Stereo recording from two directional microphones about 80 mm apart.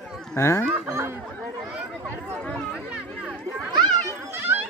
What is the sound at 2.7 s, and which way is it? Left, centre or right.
Chatter, centre.